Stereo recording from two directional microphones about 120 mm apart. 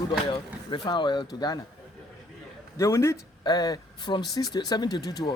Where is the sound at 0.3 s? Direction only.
45° left (ahead or behind).